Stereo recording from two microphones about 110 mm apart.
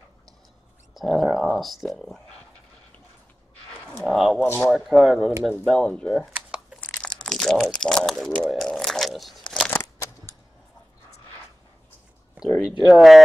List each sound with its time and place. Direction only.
0.9 s speech: centre (ahead or behind)
4.0 s speech: centre (ahead or behind)
7.0 s a sound: 5° left (ahead or behind)
7.6 s speech: 5° left (ahead or behind)
10.3 s arrow: 25° left (ahead or behind)
12.6 s speech: 5° right (ahead or behind)